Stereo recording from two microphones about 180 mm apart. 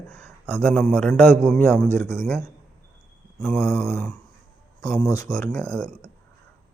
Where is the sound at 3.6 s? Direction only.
10° left (ahead or behind).